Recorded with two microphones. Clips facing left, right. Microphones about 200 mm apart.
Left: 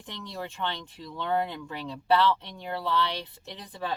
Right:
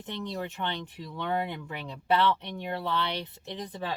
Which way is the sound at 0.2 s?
15° right (ahead or behind).